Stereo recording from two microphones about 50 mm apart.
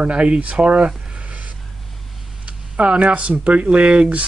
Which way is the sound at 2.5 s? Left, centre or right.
Right.